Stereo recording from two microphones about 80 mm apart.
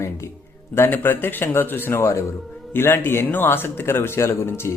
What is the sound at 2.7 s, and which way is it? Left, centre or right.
A man's voice, left.